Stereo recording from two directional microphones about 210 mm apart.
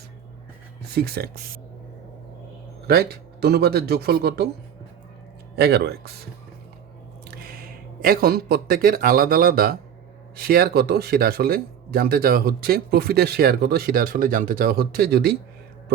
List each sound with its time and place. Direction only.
0.9 s speech: 50° right (ahead or behind)
2.8 s speech: 45° right (ahead or behind)
5.5 s speech: 50° right (ahead or behind)
8.0 s speech: 45° right (ahead or behind)